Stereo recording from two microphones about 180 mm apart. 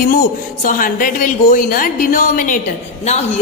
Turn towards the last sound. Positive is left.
turn(degrees=40)  # may be behind; listen again after turning